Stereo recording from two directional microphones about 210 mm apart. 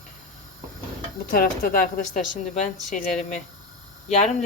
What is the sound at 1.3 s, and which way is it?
Speech, 45° left (ahead or behind).